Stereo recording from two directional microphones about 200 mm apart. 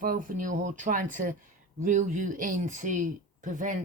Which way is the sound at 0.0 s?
45° right (ahead or behind).